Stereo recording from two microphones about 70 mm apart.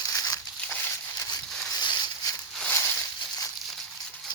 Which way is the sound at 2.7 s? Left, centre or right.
Left.